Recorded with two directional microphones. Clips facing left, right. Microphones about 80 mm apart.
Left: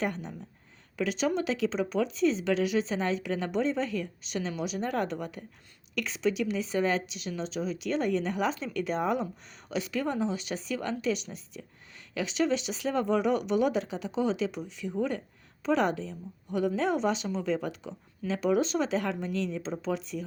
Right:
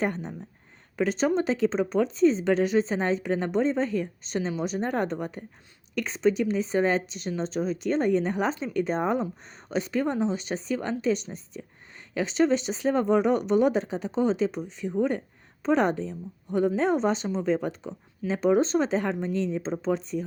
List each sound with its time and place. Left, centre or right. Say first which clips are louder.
0.0 s speech: right 4 dB; right